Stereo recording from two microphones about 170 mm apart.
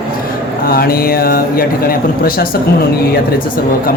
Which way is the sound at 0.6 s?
60° left (ahead or behind).